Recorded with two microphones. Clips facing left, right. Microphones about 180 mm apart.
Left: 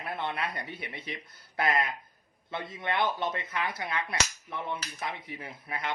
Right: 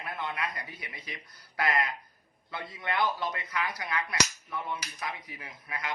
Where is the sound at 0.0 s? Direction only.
30° left (ahead or behind).